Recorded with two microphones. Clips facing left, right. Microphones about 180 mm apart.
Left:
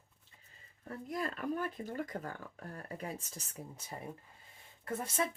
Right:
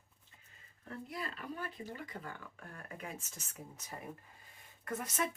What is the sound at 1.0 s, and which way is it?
Speech, 45° left (ahead or behind).